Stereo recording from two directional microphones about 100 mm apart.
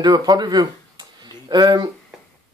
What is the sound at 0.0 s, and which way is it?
Speech, 45° right (ahead or behind).